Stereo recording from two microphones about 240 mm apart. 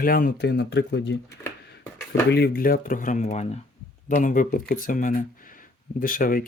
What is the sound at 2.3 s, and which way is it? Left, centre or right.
Speech, left.